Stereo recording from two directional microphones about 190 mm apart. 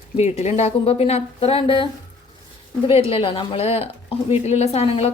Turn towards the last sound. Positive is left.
turn(degrees=35)  # may be behind; listen again after turning